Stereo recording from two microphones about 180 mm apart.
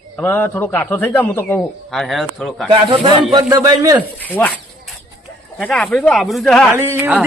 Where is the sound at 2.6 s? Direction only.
30° right (ahead or behind).